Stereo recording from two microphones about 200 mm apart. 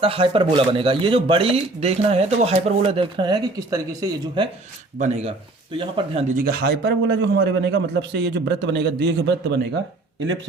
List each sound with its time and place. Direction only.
0.0 s speech: 25° right (ahead or behind)
4.9 s speech: 35° right (ahead or behind)
6.4 s a man's voice: 50° right (ahead or behind)